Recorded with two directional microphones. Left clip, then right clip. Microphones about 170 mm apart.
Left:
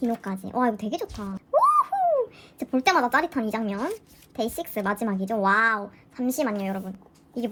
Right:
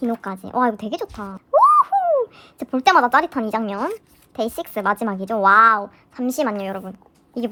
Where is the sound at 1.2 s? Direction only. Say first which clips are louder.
Right 7 dB; 40° right (ahead or behind).